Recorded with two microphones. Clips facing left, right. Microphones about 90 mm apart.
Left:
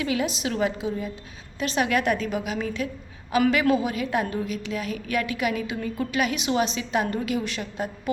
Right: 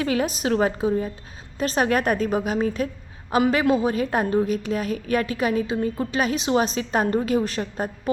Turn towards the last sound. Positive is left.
turn(degrees=-40)  # may be behind; listen again after turning